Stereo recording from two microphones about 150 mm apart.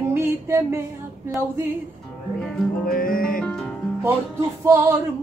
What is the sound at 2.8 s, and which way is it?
Music, 70° left (ahead or behind).